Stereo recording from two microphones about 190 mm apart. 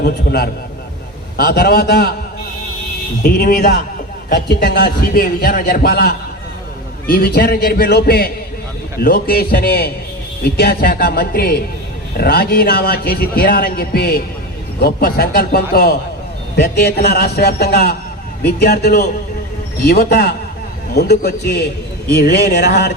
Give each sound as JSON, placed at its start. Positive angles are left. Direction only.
{"t": 0.0, "sound": "a man's voice", "side_deg": 55}
{"t": 3.2, "sound": "a man's voice", "side_deg": 55}